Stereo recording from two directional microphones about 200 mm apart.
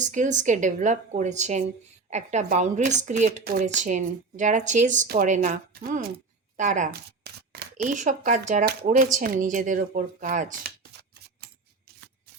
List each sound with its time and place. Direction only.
0.0 s speech: 40° right (ahead or behind)
5.8 s speech: 50° right (ahead or behind)
6.6 s speech: 40° right (ahead or behind)
7.3 s speech: 50° right (ahead or behind)